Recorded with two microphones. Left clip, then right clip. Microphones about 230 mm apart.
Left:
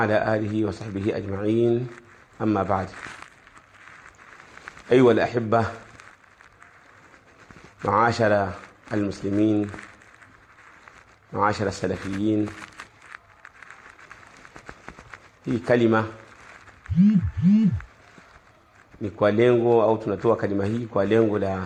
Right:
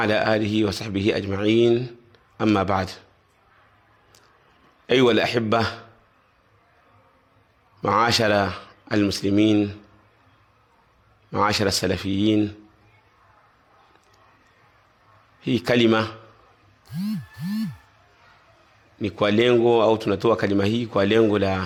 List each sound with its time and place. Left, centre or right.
0.0 s a man's voice: right
4.9 s a man's voice: right
7.8 s a man's voice: right
11.3 s a man's voice: right
15.5 s a man's voice: right
19.0 s a man's voice: right